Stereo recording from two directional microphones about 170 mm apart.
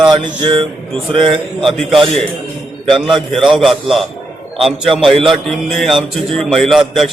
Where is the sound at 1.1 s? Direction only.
30° right (ahead or behind).